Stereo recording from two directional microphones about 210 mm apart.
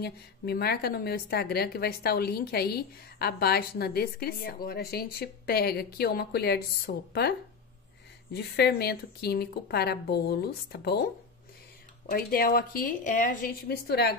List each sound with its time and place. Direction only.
0.0 s a woman's voice: 50° left (ahead or behind)
8.3 s a woman's voice: 50° left (ahead or behind)
12.1 s a woman's voice: 45° left (ahead or behind)